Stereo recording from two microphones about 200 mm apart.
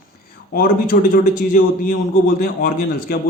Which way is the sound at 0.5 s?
45° left (ahead or behind).